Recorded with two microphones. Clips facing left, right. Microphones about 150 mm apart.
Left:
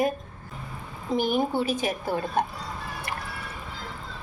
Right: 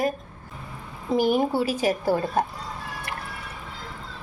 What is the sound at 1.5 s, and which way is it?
Speech, 10° right (ahead or behind).